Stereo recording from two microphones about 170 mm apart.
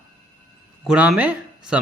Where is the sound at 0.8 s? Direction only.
5° right (ahead or behind).